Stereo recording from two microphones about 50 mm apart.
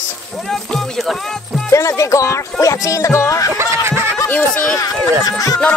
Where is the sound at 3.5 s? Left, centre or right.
Right.